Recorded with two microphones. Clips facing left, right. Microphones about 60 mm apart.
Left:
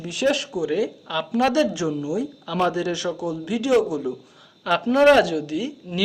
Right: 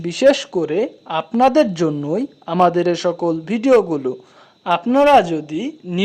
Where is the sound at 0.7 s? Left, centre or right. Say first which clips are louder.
Right 5 dB; right.